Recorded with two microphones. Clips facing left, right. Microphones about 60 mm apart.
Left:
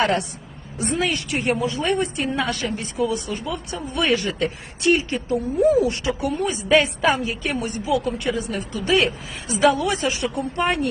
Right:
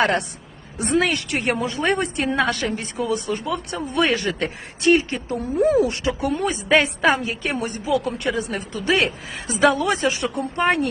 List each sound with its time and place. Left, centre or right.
0.0 s a woman's voice: right
0.9 s speech: right
2.0 s a woman's voice: right
2.4 s a woman's voice: right
6.3 s speech: right
6.6 s a woman's voice: right
8.2 s a woman's voice: right